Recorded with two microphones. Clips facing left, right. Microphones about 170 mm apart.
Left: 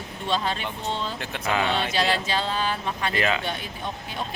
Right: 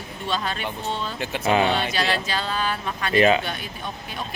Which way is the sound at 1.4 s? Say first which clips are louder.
Right 5 dB; 25° right (ahead or behind).